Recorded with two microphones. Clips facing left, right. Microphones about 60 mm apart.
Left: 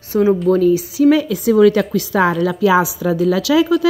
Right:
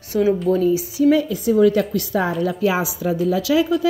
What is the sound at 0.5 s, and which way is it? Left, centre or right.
A woman's voice, left.